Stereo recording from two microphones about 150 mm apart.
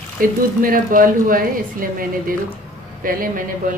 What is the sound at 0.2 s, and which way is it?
A woman's voice, 70° right (ahead or behind).